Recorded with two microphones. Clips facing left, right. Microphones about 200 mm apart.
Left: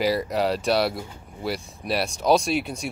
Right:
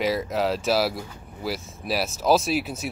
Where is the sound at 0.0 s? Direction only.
Centre (ahead or behind).